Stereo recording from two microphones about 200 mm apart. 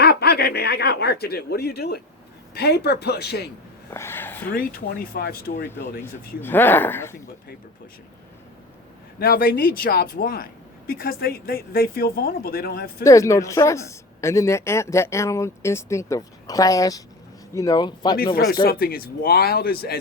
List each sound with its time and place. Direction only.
0.0 s speech: 55° left (ahead or behind)
3.9 s speech: 10° left (ahead or behind)
4.5 s speech: 45° left (ahead or behind)
6.0 s speech: 10° left (ahead or behind)
9.1 s speech: 50° left (ahead or behind)
13.1 s speech: 15° left (ahead or behind)
18.6 s speech: 50° left (ahead or behind)